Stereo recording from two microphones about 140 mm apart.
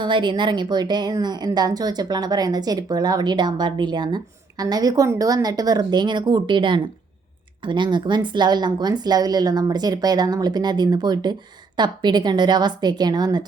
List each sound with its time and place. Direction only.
0.0 s a woman's voice: 35° right (ahead or behind)